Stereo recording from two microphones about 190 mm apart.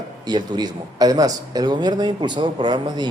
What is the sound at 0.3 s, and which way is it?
Speech, 20° right (ahead or behind).